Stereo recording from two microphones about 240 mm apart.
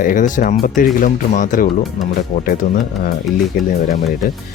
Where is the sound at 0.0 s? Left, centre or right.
Left.